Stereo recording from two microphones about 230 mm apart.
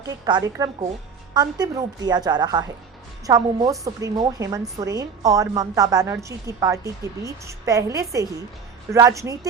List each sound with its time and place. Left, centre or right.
0.0 s a woman's voice: centre